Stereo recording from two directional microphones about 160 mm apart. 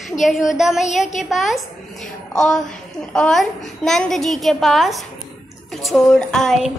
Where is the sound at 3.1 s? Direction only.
5° left (ahead or behind).